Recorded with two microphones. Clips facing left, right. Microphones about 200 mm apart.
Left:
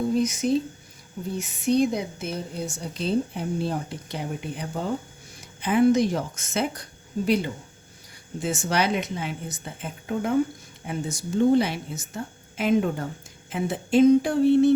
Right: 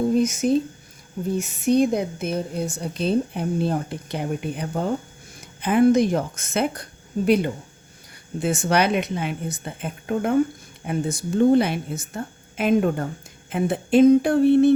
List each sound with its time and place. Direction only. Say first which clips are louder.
0.2 s a woman's voice: right 3 dB; 50° right (ahead or behind)
8.4 s a woman's voice: right 4 dB; 60° right (ahead or behind)